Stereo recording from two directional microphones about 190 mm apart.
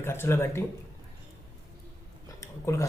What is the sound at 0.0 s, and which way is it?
Speech, 10° left (ahead or behind).